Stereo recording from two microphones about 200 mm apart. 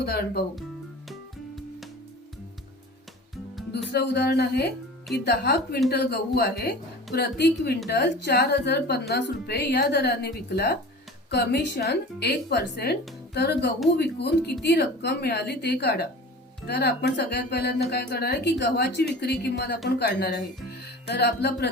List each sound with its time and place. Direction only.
0.0 s speech: 50° left (ahead or behind)
3.9 s a woman's voice: 55° left (ahead or behind)